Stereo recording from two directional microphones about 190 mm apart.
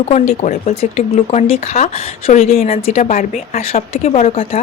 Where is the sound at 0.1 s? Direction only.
40° left (ahead or behind).